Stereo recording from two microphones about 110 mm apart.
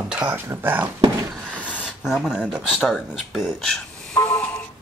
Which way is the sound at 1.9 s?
5° right (ahead or behind).